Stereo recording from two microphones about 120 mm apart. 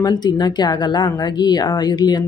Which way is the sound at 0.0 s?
35° left (ahead or behind).